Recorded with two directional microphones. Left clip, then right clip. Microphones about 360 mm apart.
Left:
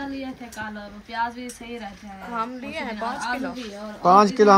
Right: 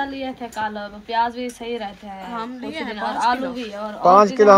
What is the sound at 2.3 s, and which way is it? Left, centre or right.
A woman's voice, centre.